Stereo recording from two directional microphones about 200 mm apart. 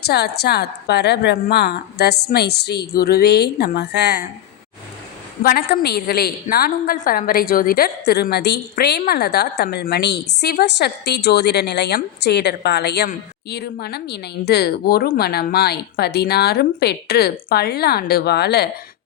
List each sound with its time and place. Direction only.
0.0 s a woman's voice: 55° left (ahead or behind)
5.4 s a woman's voice: 50° left (ahead or behind)